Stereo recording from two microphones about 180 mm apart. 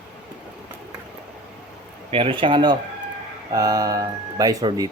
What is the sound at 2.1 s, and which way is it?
Speech, 30° right (ahead or behind).